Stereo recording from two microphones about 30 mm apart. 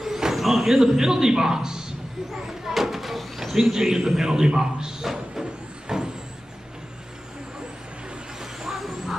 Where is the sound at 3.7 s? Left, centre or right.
Centre.